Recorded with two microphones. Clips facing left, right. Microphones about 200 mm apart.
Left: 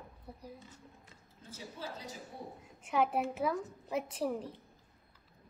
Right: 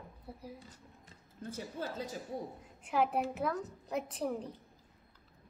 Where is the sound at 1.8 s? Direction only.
55° right (ahead or behind).